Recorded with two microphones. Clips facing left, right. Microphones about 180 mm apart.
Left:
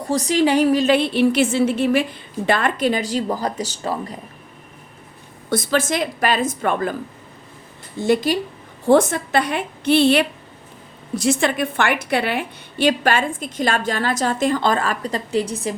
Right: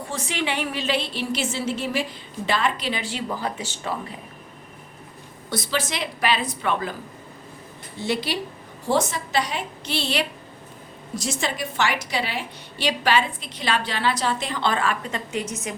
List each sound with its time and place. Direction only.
0.0 s a woman's voice: 40° left (ahead or behind)
5.5 s a woman's voice: 50° left (ahead or behind)
7.9 s a woman's voice: 50° left (ahead or behind); by 15.7 s 35° left (ahead or behind)